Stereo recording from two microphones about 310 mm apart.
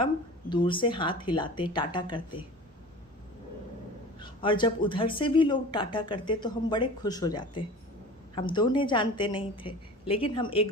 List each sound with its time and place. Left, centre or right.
0.5 s speech: centre
4.2 s speech: centre